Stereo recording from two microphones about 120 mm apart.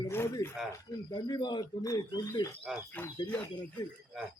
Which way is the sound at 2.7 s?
5° right (ahead or behind).